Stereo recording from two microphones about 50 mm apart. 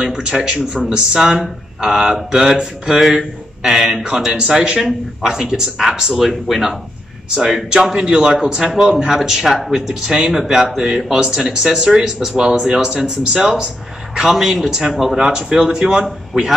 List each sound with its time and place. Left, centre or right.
0.0 s speech: centre